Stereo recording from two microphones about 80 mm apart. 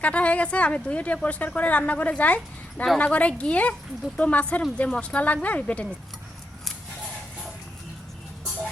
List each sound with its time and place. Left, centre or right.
0.0 s a woman's voice: centre